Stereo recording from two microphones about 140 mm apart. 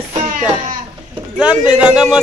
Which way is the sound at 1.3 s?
5° right (ahead or behind).